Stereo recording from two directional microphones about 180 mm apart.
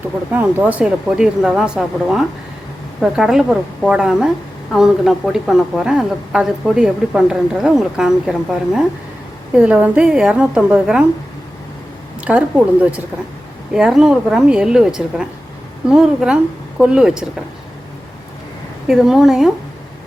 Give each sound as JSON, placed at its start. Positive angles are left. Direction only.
{"t": 0.3, "sound": "a woman's voice", "side_deg": -10}
{"t": 12.2, "sound": "a woman's voice", "side_deg": -10}
{"t": 18.9, "sound": "a woman's voice", "side_deg": 0}